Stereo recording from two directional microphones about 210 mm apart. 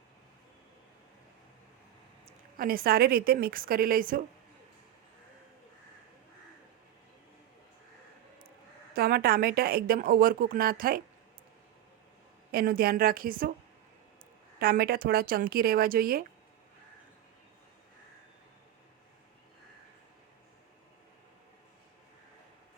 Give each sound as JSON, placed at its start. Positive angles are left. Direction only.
{"t": 2.6, "sound": "speech", "side_deg": -45}
{"t": 8.9, "sound": "speech", "side_deg": -45}
{"t": 12.5, "sound": "speech", "side_deg": -45}
{"t": 14.6, "sound": "speech", "side_deg": -45}